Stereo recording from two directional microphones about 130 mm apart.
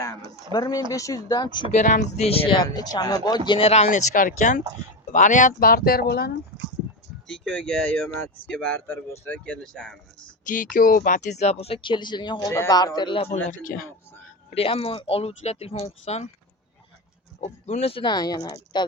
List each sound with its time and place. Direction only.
0.5 s speech: 30° left (ahead or behind)
1.7 s speech: 65° left (ahead or behind); by 2.6 s 45° left (ahead or behind)
2.6 s speech: 30° left (ahead or behind)
3.8 s speech: 90° left
5.1 s speech: 70° left (ahead or behind)
7.4 s speech: 5° left (ahead or behind)
10.4 s speech: 90° left; by 13.2 s 35° left (ahead or behind)
13.3 s speech: 85° left
14.5 s speech: 50° left (ahead or behind)
17.4 s speech: 60° left (ahead or behind); by 18.9 s 30° left (ahead or behind)